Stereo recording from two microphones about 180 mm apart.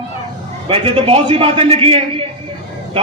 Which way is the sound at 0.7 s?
30° right (ahead or behind).